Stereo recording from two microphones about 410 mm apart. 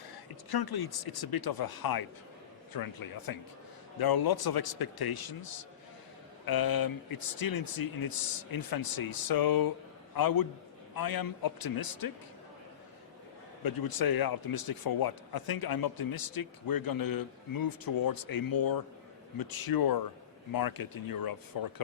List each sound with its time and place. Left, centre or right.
0.5 s speech: left
13.7 s speech: left